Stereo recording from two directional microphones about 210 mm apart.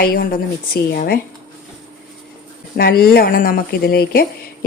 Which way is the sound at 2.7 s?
45° left (ahead or behind).